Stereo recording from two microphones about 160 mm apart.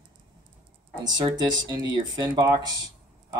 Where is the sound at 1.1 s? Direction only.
25° right (ahead or behind).